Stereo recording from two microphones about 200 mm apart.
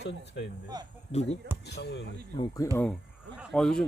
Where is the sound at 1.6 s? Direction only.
55° left (ahead or behind).